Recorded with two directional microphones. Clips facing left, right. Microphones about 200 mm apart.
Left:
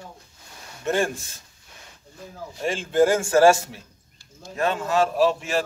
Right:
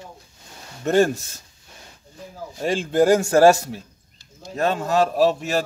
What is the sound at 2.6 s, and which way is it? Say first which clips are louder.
A man's voice: right 1 dB; 40° right (ahead or behind).